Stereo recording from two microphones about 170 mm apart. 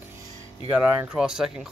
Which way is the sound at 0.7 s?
10° right (ahead or behind).